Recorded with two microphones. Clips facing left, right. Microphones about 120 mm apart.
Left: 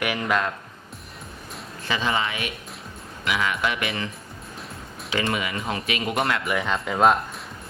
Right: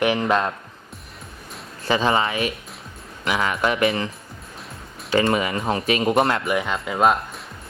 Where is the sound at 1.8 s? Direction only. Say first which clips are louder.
Right 5 dB; 35° right (ahead or behind).